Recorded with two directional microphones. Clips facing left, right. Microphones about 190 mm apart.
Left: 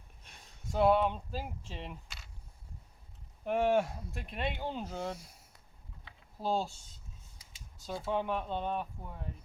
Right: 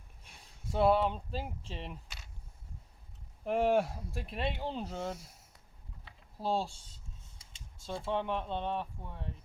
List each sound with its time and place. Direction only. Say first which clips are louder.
0.3 s speech: right 1 dB; 5° right (ahead or behind)
3.4 s speech: even; centre (ahead or behind)
6.1 s typing: even; centre (ahead or behind)
6.7 s a sound: even; 30° right (ahead or behind)
7.9 s speech: left 1 dB; 5° left (ahead or behind)